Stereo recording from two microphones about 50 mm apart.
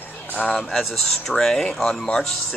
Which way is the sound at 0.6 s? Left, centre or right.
Centre.